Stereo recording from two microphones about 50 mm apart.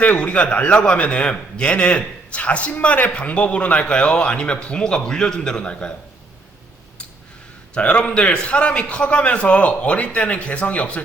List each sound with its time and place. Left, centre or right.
0.0 s a man's voice: left
7.7 s a man's voice: left